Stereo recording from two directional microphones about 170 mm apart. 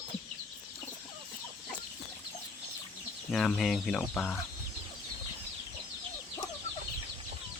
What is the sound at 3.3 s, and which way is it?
Speech, 5° left (ahead or behind).